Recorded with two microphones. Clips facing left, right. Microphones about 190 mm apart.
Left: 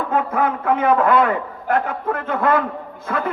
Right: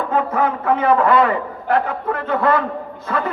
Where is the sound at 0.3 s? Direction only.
55° left (ahead or behind).